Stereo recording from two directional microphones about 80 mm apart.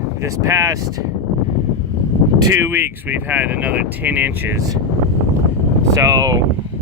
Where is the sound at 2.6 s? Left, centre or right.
Right.